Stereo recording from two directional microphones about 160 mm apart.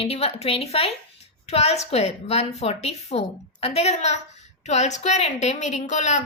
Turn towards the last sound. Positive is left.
turn(degrees=50)  # may be behind; listen again after turning